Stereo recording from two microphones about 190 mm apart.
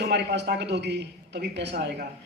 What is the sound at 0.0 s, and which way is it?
A man's voice, 65° right (ahead or behind).